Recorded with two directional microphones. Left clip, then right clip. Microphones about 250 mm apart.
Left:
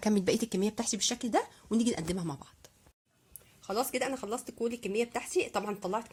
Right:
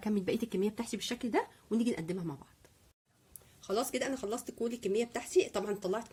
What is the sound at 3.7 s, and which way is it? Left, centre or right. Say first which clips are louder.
Speech: left 2 dB; centre.